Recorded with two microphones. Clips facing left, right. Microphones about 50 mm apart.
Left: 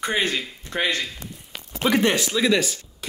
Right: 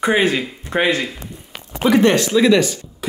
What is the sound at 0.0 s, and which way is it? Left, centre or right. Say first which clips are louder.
Speech: right 8 dB; centre.